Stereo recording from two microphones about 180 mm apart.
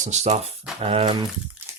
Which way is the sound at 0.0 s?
40° right (ahead or behind).